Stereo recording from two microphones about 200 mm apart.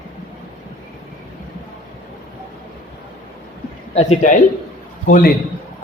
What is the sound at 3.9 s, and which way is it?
A man's voice, 35° left (ahead or behind).